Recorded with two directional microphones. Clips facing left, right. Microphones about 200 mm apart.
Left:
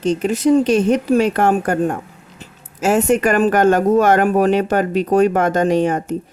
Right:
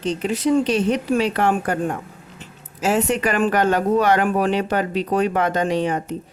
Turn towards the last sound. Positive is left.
turn(degrees=45)  # may be behind; listen again after turning